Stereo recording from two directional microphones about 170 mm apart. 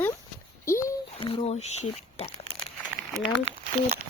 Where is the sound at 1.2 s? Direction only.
35° left (ahead or behind).